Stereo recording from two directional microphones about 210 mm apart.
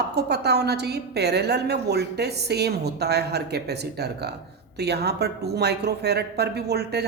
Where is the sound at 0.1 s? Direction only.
50° right (ahead or behind).